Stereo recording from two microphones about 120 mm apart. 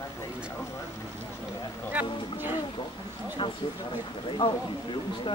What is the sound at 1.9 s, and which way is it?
Speech, 15° right (ahead or behind).